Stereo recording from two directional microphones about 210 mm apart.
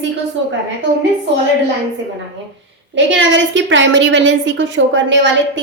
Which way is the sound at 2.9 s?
60° right (ahead or behind).